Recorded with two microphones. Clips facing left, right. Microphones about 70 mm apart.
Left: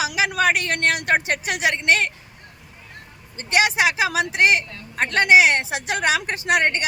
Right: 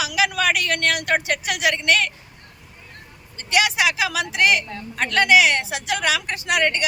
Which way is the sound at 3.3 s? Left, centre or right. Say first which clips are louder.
Left 1 dB; left.